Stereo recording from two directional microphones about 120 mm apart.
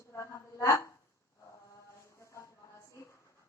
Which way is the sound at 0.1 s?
25° left (ahead or behind).